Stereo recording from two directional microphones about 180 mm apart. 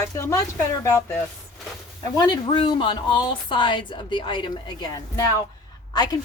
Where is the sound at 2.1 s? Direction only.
25° left (ahead or behind).